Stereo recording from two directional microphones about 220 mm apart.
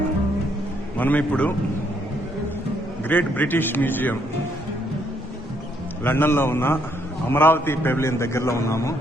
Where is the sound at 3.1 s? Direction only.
5° left (ahead or behind).